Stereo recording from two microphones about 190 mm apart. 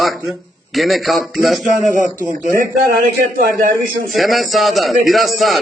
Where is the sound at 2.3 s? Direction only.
45° right (ahead or behind).